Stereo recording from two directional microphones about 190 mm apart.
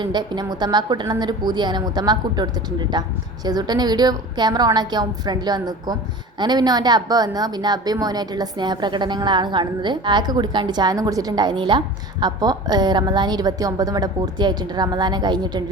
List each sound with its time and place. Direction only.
0.0 s a woman's voice: 25° right (ahead or behind)